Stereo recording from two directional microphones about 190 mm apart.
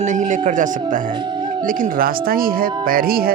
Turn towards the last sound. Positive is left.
turn(degrees=-50)  # may be behind; listen again after turning